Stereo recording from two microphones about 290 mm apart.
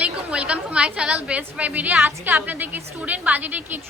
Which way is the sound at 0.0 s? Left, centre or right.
Centre.